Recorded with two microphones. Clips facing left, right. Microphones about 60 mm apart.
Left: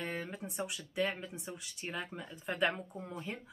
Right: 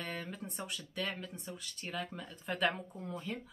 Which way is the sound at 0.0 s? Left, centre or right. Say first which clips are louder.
Left 2 dB; centre.